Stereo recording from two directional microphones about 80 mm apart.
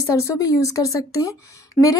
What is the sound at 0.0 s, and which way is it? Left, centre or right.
Speech, left.